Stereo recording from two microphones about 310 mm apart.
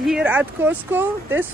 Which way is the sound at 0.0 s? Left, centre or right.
Centre.